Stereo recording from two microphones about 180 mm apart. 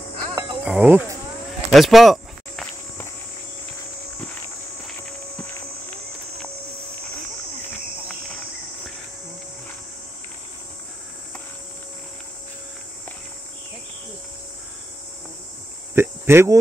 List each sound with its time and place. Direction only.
0.2 s music: 20° right (ahead or behind)
0.7 s speech: 10° right (ahead or behind)
1.7 s cricket: centre (ahead or behind)
15.9 s cricket: 15° right (ahead or behind)